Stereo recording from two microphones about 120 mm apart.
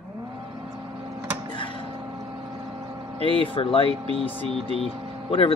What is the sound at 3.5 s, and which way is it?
Speech, 50° left (ahead or behind).